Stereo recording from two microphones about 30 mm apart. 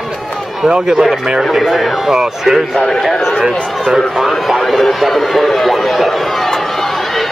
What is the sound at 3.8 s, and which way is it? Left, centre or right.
A man's voice, centre.